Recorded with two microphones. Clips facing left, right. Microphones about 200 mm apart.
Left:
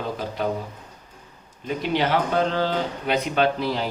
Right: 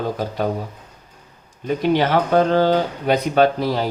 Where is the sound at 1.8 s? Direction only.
45° right (ahead or behind).